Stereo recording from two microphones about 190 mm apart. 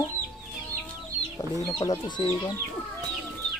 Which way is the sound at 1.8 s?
20° left (ahead or behind).